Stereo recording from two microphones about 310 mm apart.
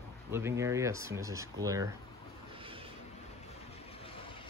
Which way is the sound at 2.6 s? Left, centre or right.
Centre.